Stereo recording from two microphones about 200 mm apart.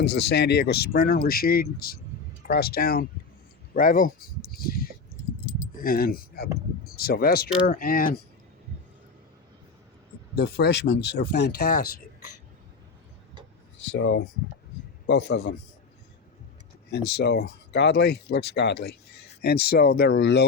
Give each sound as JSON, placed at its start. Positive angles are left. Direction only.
{"t": 0.0, "sound": "speech", "side_deg": 55}
{"t": 5.5, "sound": "keys jangling", "side_deg": 45}
{"t": 6.9, "sound": "speech", "side_deg": 50}
{"t": 10.3, "sound": "speech", "side_deg": 55}
{"t": 14.0, "sound": "speech", "side_deg": 60}
{"t": 16.9, "sound": "speech", "side_deg": 55}